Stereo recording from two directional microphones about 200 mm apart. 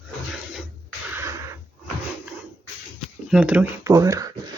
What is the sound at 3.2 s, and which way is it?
Speech, 5° right (ahead or behind).